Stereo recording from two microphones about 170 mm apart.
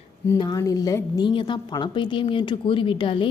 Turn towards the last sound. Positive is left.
turn(degrees=30)  # may be behind; listen again after turning